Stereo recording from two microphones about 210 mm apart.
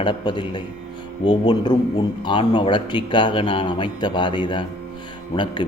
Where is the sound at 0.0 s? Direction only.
20° left (ahead or behind).